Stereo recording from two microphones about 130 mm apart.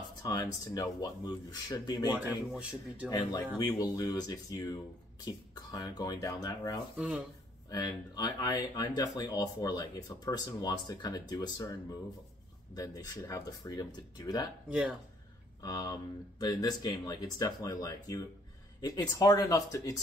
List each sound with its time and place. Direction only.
0.3 s speech: 30° left (ahead or behind)
2.1 s speech: 10° right (ahead or behind)
3.1 s speech: 35° left (ahead or behind)
7.0 s speech: 10° right (ahead or behind)
7.7 s speech: 30° left (ahead or behind)
12.7 s speech: 30° left (ahead or behind)
14.7 s speech: 5° right (ahead or behind)
15.6 s speech: 30° left (ahead or behind)